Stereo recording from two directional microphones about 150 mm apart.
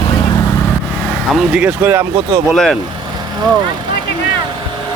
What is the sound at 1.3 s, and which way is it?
Speech, 5° right (ahead or behind).